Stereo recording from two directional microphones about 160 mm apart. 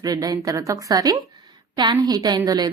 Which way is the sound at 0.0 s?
25° right (ahead or behind).